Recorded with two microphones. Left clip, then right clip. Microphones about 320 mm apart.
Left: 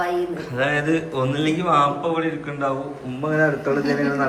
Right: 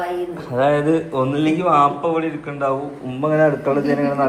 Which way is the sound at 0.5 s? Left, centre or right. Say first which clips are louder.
Right 5 dB; centre.